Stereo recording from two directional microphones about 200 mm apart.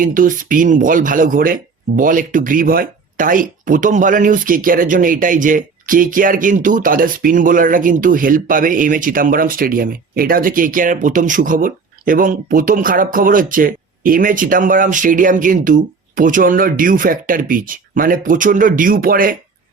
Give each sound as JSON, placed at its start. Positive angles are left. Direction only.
{"t": 0.0, "sound": "speech", "side_deg": -40}